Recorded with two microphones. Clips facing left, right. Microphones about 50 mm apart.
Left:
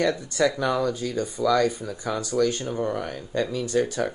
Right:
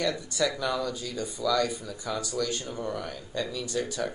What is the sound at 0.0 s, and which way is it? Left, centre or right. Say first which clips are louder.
Speech: left 5 dB; left.